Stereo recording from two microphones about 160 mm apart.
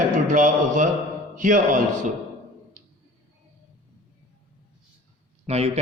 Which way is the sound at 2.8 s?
50° right (ahead or behind).